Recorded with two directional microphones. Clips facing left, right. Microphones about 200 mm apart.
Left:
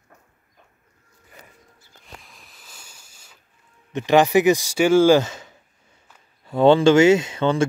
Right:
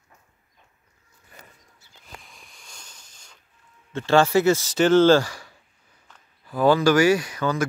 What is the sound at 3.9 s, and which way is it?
Speech, 15° left (ahead or behind).